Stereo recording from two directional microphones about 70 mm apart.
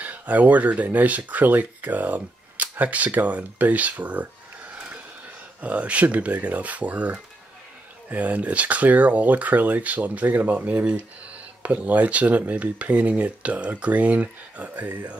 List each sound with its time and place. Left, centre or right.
0.0 s speech: right
5.6 s speech: right